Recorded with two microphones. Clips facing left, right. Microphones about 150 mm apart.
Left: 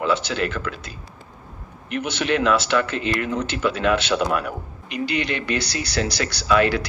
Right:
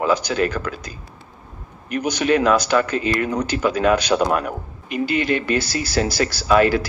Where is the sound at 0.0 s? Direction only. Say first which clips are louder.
Right 3 dB; 40° right (ahead or behind).